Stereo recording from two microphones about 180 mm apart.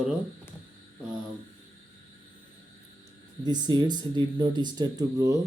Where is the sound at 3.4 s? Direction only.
20° right (ahead or behind).